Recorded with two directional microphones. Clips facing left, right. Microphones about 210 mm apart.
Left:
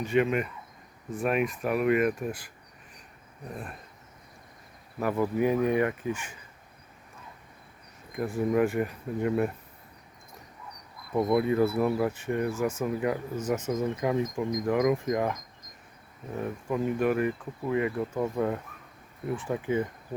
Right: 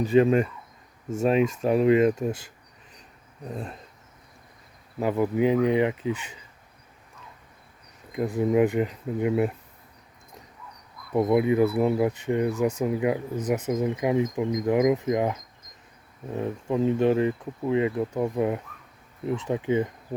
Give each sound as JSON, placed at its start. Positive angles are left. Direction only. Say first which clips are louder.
{"t": 0.0, "sound": "speech", "louder": "right 6 dB", "side_deg": -35}
{"t": 3.5, "sound": "speech", "louder": "right 5 dB", "side_deg": -25}
{"t": 4.9, "sound": "speech", "louder": "right 3 dB", "side_deg": -20}
{"t": 8.1, "sound": "speech", "louder": "right 4 dB", "side_deg": -20}
{"t": 11.1, "sound": "speech", "louder": "right 3 dB", "side_deg": -20}